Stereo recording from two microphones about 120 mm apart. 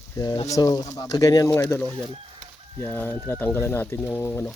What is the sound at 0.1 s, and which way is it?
Speech, 30° left (ahead or behind).